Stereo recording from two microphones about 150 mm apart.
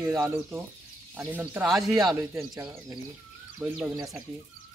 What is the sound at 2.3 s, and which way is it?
Speech, 20° right (ahead or behind).